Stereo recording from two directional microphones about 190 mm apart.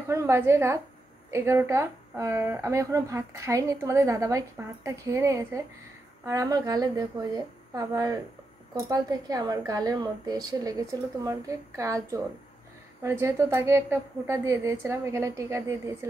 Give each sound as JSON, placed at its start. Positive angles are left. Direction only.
{"t": 0.1, "sound": "a woman's voice", "side_deg": -15}